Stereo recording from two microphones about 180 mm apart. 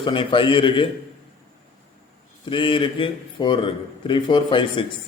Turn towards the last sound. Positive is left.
turn(degrees=30)  # may be behind; listen again after turning